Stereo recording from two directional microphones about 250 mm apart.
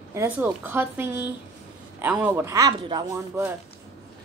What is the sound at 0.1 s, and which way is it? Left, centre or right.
Speech, centre.